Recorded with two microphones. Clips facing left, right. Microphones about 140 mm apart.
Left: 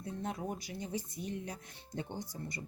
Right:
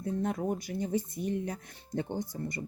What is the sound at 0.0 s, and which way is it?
Speech, 50° right (ahead or behind).